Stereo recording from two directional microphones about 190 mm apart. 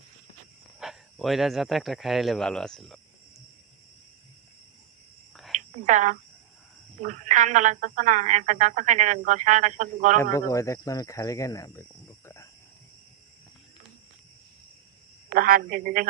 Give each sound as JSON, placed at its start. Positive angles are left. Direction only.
{"t": 0.8, "sound": "speech", "side_deg": 0}
{"t": 5.8, "sound": "speech", "side_deg": -40}
{"t": 10.2, "sound": "speech", "side_deg": 15}
{"t": 15.3, "sound": "speech", "side_deg": -45}